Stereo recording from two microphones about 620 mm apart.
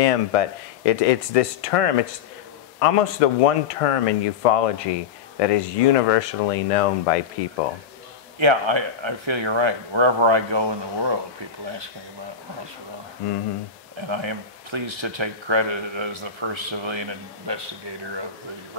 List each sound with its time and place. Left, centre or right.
0.0 s speech: left
8.4 s speech: right
14.0 s speech: right